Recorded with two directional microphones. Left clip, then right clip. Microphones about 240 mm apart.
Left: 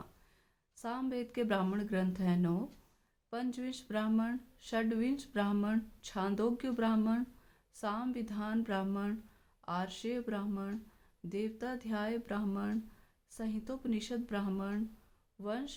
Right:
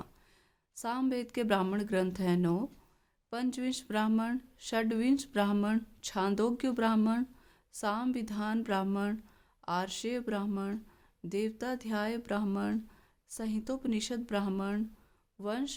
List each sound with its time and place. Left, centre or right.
0.8 s speech: right